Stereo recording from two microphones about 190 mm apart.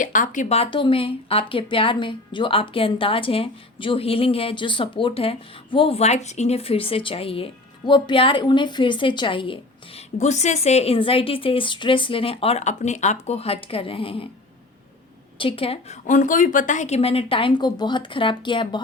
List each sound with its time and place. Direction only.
0.0 s speech: 45° left (ahead or behind)
15.4 s speech: 30° left (ahead or behind)